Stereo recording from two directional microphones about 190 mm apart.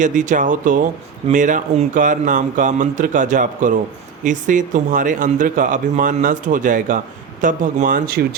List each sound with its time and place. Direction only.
0.0 s a man's voice: 40° right (ahead or behind)